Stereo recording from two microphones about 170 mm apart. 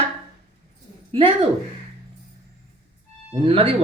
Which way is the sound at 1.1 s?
35° right (ahead or behind).